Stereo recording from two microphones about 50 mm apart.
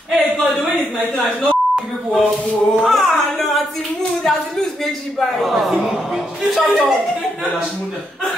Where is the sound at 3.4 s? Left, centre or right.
Centre.